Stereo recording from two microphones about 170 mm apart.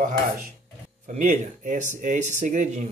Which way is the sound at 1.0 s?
45° right (ahead or behind).